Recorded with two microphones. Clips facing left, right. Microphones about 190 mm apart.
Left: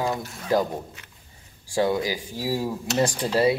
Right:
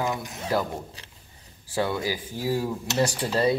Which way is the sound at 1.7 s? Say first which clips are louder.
Left 3 dB; 15° left (ahead or behind).